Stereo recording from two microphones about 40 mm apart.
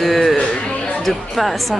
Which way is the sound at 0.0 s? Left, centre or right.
Centre.